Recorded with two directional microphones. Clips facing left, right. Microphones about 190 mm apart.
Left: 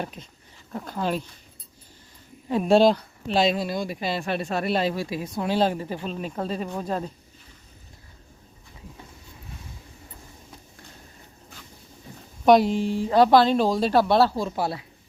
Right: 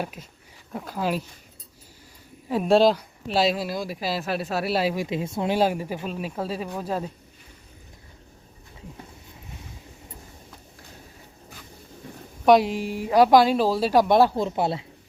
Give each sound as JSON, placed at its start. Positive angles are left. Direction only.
{"t": 0.0, "sound": "speech", "side_deg": -10}
{"t": 2.5, "sound": "speech", "side_deg": 0}
{"t": 5.0, "sound": "speech", "side_deg": -25}
{"t": 5.5, "sound": "speech", "side_deg": -10}
{"t": 12.5, "sound": "speech", "side_deg": -5}